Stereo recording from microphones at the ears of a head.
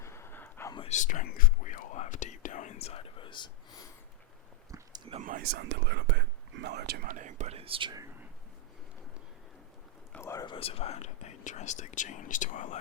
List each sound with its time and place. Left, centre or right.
0.6 s whispering: left
4.9 s speech: right
10.4 s speech: left